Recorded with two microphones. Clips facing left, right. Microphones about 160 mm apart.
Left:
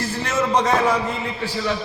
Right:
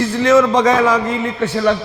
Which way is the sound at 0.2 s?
90° right.